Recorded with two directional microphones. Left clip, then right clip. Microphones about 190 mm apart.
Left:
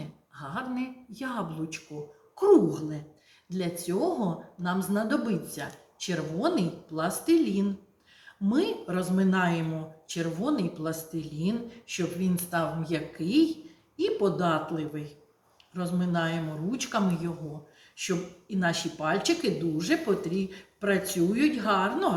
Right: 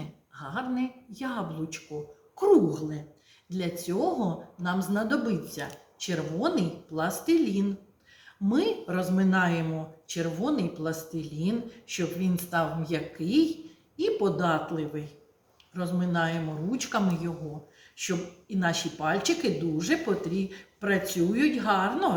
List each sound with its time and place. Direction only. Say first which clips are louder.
0.3 s speech: right 2 dB; centre (ahead or behind)